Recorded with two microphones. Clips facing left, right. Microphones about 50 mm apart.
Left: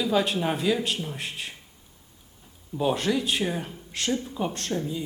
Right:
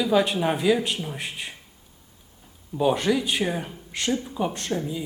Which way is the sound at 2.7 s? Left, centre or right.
Centre.